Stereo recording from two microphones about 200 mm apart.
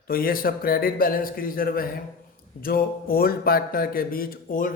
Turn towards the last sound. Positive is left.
turn(degrees=40)  # may be behind; listen again after turning